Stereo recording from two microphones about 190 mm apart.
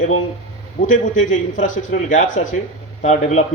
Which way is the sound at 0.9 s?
40° left (ahead or behind).